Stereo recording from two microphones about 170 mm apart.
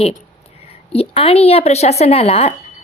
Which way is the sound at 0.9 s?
35° left (ahead or behind).